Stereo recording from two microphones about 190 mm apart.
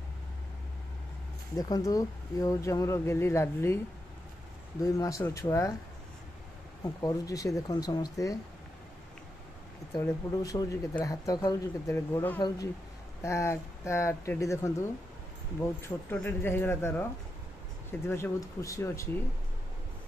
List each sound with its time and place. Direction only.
1.6 s speech: 20° left (ahead or behind)
4.8 s speech: 15° left (ahead or behind)
6.8 s speech: 20° left (ahead or behind)
10.0 s speech: 20° left (ahead or behind)
18.0 s speech: 15° left (ahead or behind)